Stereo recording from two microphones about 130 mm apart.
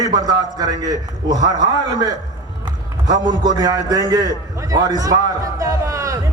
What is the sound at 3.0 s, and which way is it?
A man's voice, 30° right (ahead or behind).